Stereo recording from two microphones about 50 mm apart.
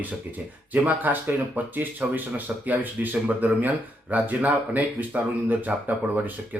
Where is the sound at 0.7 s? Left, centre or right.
Right.